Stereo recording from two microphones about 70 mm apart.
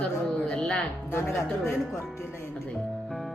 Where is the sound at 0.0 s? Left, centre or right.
Centre.